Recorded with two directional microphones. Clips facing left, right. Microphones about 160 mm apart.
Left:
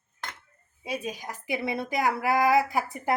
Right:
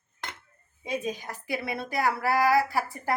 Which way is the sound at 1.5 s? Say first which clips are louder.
Left 3 dB; 20° left (ahead or behind).